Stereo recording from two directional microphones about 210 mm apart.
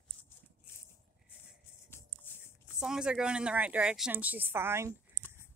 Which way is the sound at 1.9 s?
10° left (ahead or behind).